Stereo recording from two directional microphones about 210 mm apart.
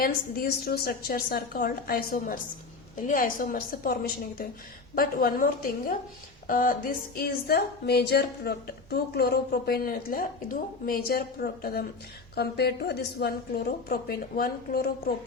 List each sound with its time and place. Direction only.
0.0 s a woman's voice: 45° left (ahead or behind)
4.9 s a woman's voice: 45° left (ahead or behind)